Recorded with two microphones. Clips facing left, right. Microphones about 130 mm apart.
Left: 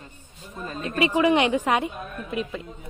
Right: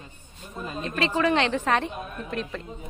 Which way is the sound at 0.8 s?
15° left (ahead or behind).